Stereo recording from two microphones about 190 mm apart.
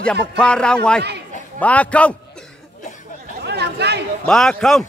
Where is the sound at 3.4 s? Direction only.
60° right (ahead or behind).